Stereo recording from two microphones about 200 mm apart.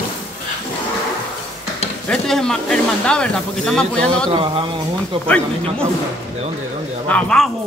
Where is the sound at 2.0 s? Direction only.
Centre (ahead or behind).